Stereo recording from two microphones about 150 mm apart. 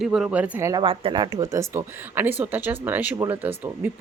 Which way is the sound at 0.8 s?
35° right (ahead or behind).